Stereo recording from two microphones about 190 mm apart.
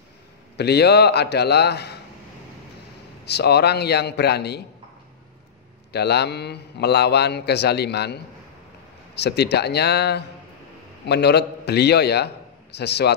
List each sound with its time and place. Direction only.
0.6 s a man's voice: 60° left (ahead or behind)
3.3 s a man's voice: 60° left (ahead or behind)
5.9 s a man's voice: 60° left (ahead or behind)